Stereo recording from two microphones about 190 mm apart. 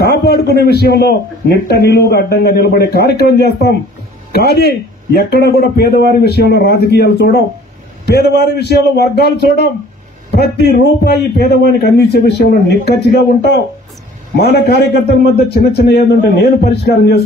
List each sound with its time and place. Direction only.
0.0 s a man's voice: 55° left (ahead or behind)